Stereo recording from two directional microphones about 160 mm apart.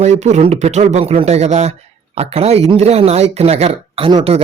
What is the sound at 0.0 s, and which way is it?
Speech, 45° right (ahead or behind).